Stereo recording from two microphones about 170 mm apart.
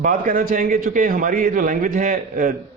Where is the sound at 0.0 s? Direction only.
55° right (ahead or behind).